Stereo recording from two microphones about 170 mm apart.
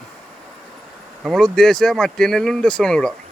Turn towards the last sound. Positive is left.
turn(degrees=5)  # may be behind; listen again after turning